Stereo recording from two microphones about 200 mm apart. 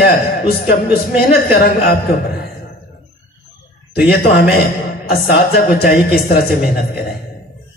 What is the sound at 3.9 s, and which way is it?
A man's voice, 55° left (ahead or behind).